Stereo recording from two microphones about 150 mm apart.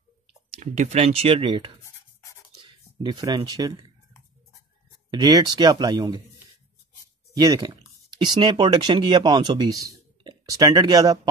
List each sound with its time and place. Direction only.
0.3 s speech: 50° right (ahead or behind); by 1.7 s 35° right (ahead or behind)
3.1 s speech: 30° right (ahead or behind)
5.1 s speech: 25° right (ahead or behind)
7.3 s speech: 25° right (ahead or behind)